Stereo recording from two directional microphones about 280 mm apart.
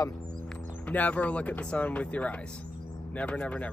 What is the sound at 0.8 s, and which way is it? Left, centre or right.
Speech, centre.